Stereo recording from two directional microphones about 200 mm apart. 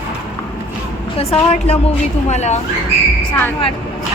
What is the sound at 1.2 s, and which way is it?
A woman's voice, 30° left (ahead or behind).